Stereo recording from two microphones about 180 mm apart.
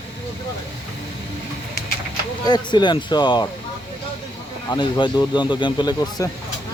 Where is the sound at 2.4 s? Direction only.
25° left (ahead or behind).